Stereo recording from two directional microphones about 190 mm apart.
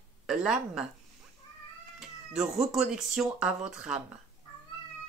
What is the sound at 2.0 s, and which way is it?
Speech, centre (ahead or behind).